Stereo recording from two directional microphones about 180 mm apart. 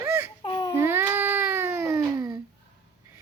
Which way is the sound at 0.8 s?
10° right (ahead or behind).